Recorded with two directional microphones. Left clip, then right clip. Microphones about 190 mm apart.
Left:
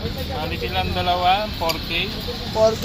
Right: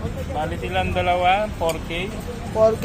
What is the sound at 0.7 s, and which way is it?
Speech, 25° right (ahead or behind).